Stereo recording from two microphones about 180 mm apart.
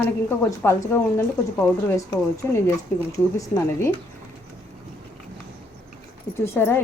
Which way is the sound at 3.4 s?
15° left (ahead or behind).